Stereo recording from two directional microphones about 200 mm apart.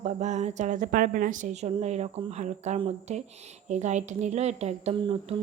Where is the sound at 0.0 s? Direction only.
35° right (ahead or behind).